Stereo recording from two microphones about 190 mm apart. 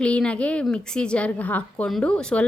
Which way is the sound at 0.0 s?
5° left (ahead or behind).